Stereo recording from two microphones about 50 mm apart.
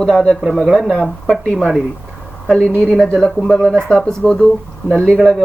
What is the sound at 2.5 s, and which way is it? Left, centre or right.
Speech, centre.